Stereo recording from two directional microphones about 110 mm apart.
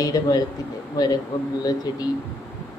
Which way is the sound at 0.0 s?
35° left (ahead or behind).